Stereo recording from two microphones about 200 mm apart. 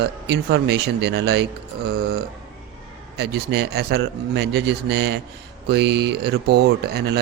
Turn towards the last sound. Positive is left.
turn(degrees=-55)  # may be behind; listen again after turning